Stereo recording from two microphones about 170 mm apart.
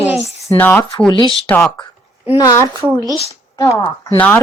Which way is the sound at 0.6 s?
10° left (ahead or behind).